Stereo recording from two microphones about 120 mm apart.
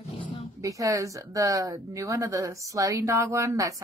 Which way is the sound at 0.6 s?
30° right (ahead or behind).